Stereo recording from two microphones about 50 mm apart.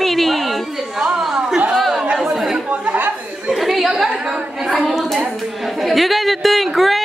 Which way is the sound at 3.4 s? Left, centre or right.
Centre.